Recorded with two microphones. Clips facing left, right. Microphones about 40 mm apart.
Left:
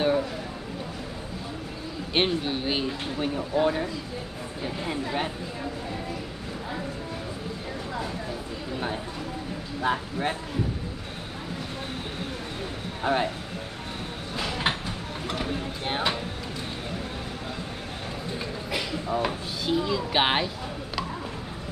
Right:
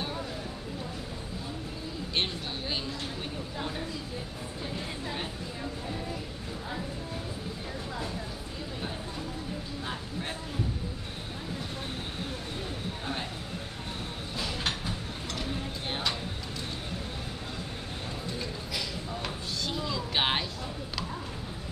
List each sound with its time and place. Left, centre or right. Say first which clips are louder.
2.1 s speech: left 8 dB; left
9.8 s speech: left 13 dB; left
13.0 s speech: left 13 dB; left
14.7 s a sound: left 5 dB; left
18.7 s speech: left 7 dB; left
19.2 s speech: left 6 dB; centre